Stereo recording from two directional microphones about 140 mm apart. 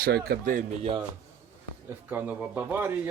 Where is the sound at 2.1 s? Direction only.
10° right (ahead or behind).